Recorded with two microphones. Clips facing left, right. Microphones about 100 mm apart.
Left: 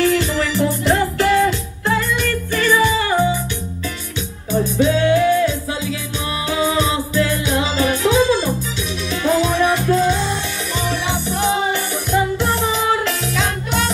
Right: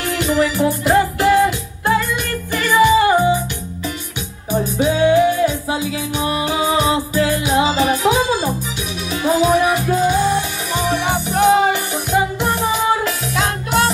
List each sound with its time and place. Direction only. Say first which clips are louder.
0.0 s music: even; 15° right (ahead or behind)
4.5 s music: left 1 dB; 15° right (ahead or behind)
11.1 s music: right 8 dB; 60° right (ahead or behind)
12.1 s music: even; 10° right (ahead or behind)